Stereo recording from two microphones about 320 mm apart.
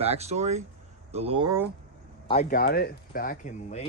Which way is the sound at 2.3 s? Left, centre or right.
Left.